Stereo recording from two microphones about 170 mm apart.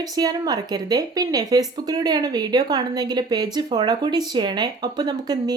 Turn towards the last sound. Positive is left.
turn(degrees=-25)  # may be behind; listen again after turning